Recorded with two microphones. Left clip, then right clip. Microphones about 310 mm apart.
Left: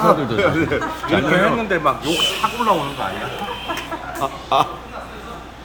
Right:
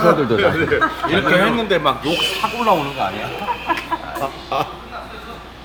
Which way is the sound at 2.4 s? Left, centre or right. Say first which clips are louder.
Right 3 dB; right.